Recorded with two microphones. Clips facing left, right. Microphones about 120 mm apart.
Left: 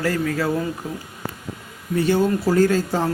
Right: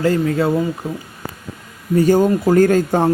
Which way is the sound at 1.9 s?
45° right (ahead or behind).